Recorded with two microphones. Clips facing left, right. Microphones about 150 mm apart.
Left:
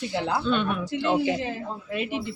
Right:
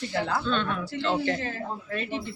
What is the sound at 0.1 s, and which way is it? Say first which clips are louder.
Speech: left 2 dB; 20° left (ahead or behind).